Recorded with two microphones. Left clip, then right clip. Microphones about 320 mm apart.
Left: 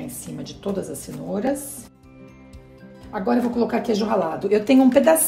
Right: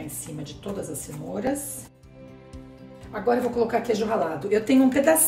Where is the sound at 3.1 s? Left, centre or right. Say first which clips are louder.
Left 1 dB; centre.